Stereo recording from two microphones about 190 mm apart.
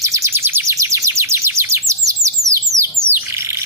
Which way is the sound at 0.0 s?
15° right (ahead or behind).